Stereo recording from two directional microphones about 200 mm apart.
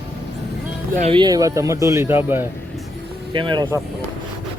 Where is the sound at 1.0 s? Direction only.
25° right (ahead or behind).